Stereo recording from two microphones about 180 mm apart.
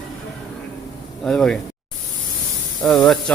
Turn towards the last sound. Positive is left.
turn(degrees=5)  # may be behind; listen again after turning